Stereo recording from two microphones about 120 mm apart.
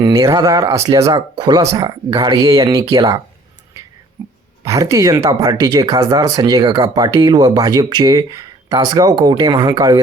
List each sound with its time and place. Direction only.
0.0 s speech: 25° right (ahead or behind)
4.2 s dog: 20° right (ahead or behind)
4.6 s speech: 25° right (ahead or behind)